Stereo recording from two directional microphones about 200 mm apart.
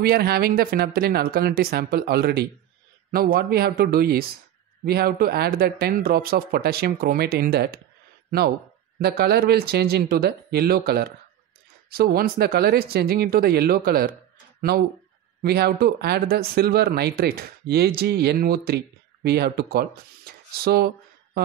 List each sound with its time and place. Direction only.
0.0 s speech: 50° right (ahead or behind)
9.0 s speech: 50° right (ahead or behind)